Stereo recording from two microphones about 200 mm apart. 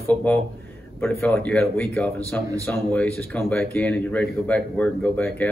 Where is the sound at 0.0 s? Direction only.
5° left (ahead or behind).